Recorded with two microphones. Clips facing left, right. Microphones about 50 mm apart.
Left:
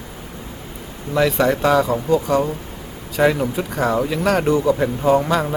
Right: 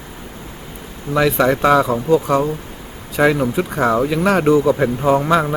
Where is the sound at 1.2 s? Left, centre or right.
Centre.